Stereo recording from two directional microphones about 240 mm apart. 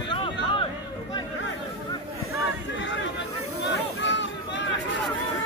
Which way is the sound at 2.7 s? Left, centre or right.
Left.